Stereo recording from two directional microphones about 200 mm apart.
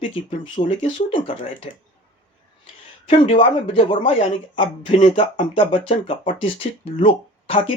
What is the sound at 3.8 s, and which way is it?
Speech, 25° left (ahead or behind).